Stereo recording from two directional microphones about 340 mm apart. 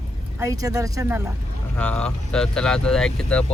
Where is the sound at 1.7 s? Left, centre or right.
Centre.